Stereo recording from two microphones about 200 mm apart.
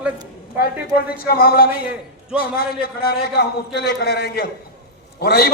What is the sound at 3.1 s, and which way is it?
A man's voice, 50° left (ahead or behind).